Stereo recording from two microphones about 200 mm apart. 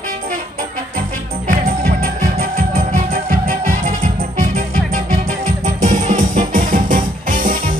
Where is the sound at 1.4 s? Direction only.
40° right (ahead or behind).